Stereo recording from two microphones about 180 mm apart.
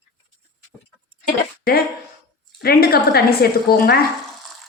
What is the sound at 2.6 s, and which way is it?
A woman's voice, 60° left (ahead or behind).